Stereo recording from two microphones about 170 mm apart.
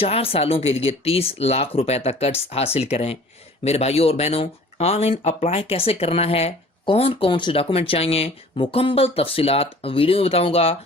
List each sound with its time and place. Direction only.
0.0 s speech: 35° left (ahead or behind)